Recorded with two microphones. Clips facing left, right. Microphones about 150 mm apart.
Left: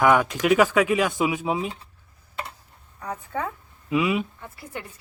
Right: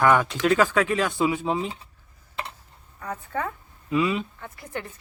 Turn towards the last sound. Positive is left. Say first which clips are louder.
# right 2 dB
turn(degrees=5)  # may be behind; listen again after turning